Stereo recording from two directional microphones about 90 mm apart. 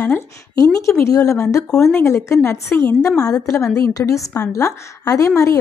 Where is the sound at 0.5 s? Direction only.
35° left (ahead or behind).